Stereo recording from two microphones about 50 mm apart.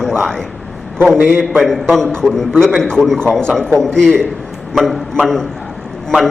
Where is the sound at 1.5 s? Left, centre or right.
Centre.